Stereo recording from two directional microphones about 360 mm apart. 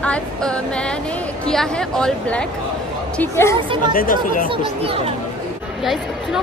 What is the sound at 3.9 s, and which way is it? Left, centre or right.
Speech, left.